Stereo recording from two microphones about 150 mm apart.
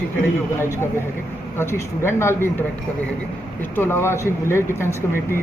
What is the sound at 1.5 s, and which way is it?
Speech, 15° left (ahead or behind).